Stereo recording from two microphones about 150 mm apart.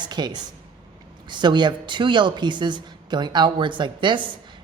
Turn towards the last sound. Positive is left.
turn(degrees=-30)  # may be behind; listen again after turning